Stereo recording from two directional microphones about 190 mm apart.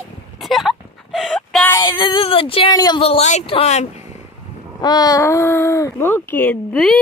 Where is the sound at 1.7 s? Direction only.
20° left (ahead or behind).